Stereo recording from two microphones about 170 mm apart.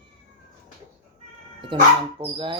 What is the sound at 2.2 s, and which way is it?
Speech, 30° right (ahead or behind).